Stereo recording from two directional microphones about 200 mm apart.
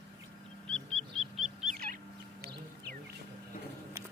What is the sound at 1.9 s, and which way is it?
Fowl, 50° right (ahead or behind).